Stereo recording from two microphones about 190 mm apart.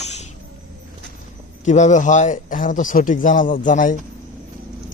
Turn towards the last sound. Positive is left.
turn(degrees=45)  # may be behind; listen again after turning